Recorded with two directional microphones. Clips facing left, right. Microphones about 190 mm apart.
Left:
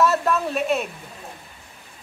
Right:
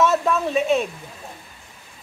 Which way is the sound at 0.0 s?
Centre (ahead or behind).